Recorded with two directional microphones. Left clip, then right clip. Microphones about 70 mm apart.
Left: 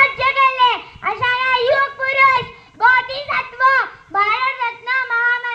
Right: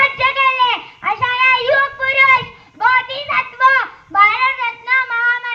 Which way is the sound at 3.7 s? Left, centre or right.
Right.